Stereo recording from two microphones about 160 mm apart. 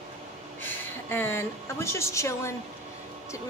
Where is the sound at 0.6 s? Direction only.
15° left (ahead or behind).